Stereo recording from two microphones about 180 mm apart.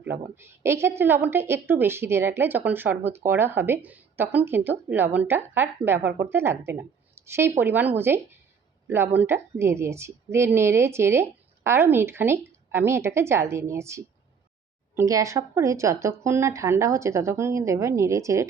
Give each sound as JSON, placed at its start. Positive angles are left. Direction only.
{"t": 0.0, "sound": "a woman's voice", "side_deg": -10}